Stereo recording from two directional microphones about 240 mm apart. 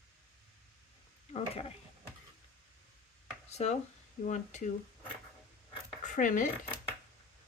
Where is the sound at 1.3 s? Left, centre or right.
Left.